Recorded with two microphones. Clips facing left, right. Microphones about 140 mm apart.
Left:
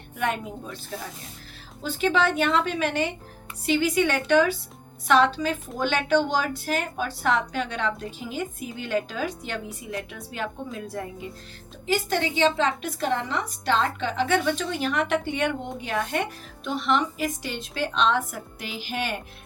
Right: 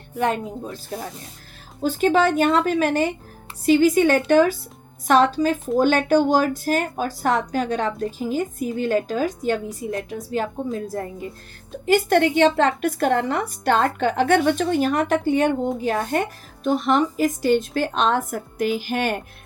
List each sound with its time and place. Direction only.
0.2 s a woman's voice: 35° right (ahead or behind)
11.9 s a woman's voice: 60° right (ahead or behind)